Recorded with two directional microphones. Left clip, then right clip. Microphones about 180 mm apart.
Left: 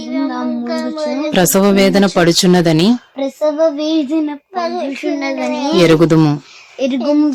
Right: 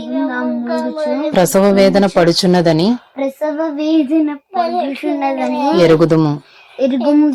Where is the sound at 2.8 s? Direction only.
40° left (ahead or behind).